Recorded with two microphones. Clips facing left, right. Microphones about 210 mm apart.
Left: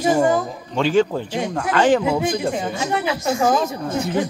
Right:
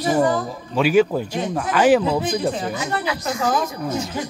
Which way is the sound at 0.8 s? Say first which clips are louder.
Right 1 dB; 10° right (ahead or behind).